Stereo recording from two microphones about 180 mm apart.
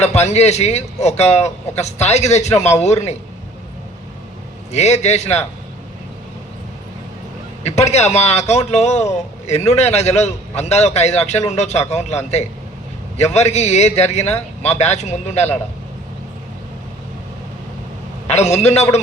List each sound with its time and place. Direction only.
0.0 s a man's voice: 40° left (ahead or behind)
4.7 s a man's voice: 40° left (ahead or behind)
7.6 s a man's voice: 40° left (ahead or behind)
18.3 s a man's voice: 40° left (ahead or behind)